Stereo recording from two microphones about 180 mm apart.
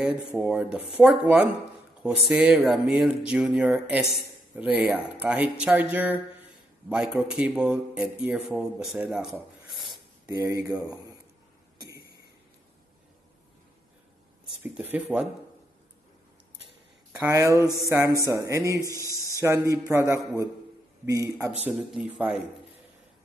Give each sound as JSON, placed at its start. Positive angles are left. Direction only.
{"t": 0.0, "sound": "a man's voice", "side_deg": -5}
{"t": 10.2, "sound": "speech", "side_deg": -20}
{"t": 14.5, "sound": "speech", "side_deg": -5}
{"t": 17.2, "sound": "speech", "side_deg": -15}
{"t": 18.8, "sound": "a man's voice", "side_deg": 15}
{"t": 19.4, "sound": "speech", "side_deg": -15}